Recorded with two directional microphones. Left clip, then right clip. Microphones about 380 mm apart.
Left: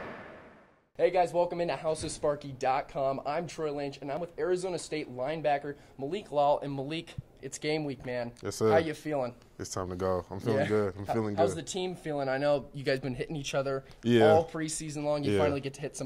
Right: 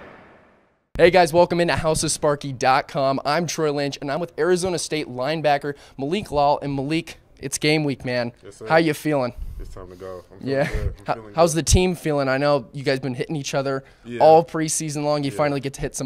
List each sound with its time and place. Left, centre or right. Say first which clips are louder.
0.9 s speech: right 12 dB; right
9.6 s speech: left 4 dB; centre
11.3 s speech: right 14 dB; right
12.7 s speech: right 8 dB; right
14.3 s speech: right 10 dB; right